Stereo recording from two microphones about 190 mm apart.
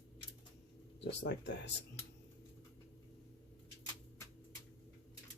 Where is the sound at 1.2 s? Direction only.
65° left (ahead or behind).